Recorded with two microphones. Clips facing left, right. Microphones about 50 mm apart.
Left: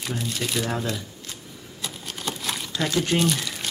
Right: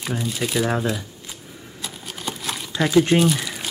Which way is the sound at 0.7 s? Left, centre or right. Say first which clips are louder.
Right 5 dB; centre.